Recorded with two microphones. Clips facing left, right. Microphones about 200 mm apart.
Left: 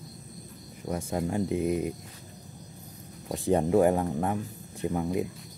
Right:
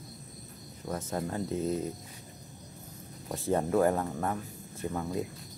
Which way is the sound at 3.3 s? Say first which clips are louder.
Left 4 dB; 15° left (ahead or behind).